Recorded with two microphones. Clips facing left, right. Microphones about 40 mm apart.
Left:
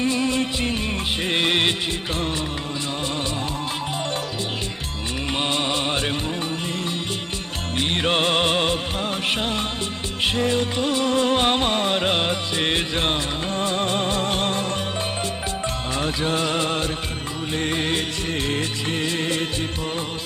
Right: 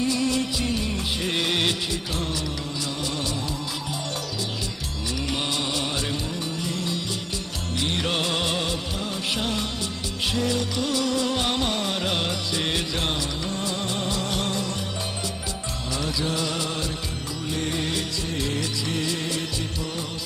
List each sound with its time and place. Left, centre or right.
0.0 s music: left
5.3 s music: left
7.8 s music: left
9.3 s music of bollywood: left
10.2 s music: left
16.0 s music: left